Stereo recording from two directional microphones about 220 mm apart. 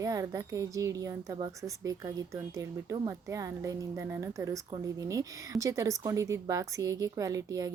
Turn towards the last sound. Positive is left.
turn(degrees=-15)  # may be behind; listen again after turning